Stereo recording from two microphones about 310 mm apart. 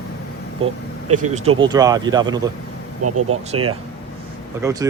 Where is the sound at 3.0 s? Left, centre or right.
Right.